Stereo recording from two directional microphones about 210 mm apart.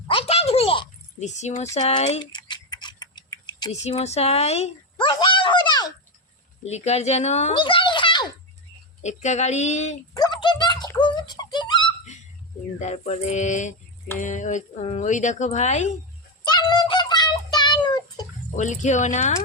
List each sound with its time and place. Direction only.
0.1 s a sound: 30° left (ahead or behind)
3.7 s speech: 30° left (ahead or behind)
6.7 s speech: 30° left (ahead or behind)
7.6 s a sound: 25° left (ahead or behind)
9.0 s speech: 35° left (ahead or behind)
10.2 s a sound: 20° left (ahead or behind)
12.8 s speech: 30° left (ahead or behind)
16.5 s child singing: 20° left (ahead or behind)
18.5 s speech: 35° left (ahead or behind)